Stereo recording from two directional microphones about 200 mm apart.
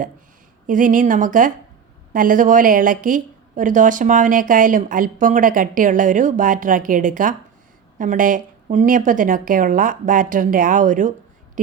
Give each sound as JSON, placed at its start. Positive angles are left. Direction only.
{"t": 0.7, "sound": "a woman's voice", "side_deg": -40}